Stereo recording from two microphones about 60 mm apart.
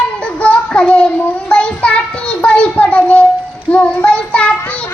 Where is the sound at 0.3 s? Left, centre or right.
Centre.